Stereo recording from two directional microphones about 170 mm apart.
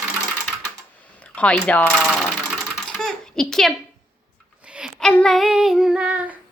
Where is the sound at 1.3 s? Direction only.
5° left (ahead or behind).